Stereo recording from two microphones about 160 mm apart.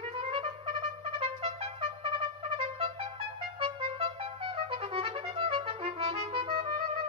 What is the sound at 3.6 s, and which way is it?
Music, 35° right (ahead or behind).